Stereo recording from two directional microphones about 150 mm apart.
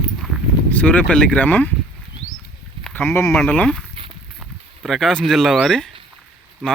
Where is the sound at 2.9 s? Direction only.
15° left (ahead or behind).